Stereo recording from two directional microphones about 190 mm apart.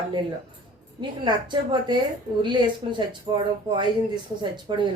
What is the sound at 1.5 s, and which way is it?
A woman's voice, 25° right (ahead or behind).